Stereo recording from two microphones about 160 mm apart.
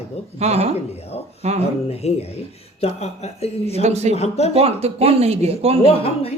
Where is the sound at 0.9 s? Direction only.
40° left (ahead or behind).